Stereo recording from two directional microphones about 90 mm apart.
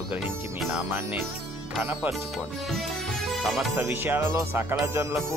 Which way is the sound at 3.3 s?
Centre (ahead or behind).